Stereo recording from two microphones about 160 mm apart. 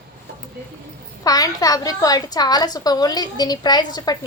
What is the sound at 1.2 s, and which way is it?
A woman's voice, 20° left (ahead or behind).